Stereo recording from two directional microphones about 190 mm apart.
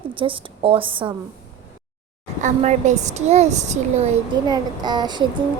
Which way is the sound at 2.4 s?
40° right (ahead or behind).